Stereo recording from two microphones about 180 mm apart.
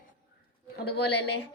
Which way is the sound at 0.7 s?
65° left (ahead or behind).